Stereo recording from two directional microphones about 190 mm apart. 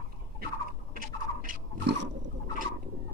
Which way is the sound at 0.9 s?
45° right (ahead or behind).